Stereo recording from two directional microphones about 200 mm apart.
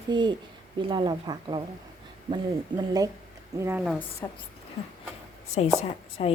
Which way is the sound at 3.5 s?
15° right (ahead or behind).